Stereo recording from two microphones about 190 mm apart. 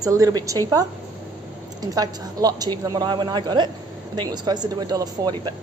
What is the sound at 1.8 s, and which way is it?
A woman's voice, 20° right (ahead or behind).